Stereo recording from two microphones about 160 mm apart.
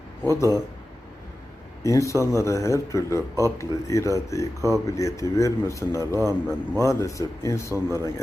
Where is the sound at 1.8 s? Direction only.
20° left (ahead or behind).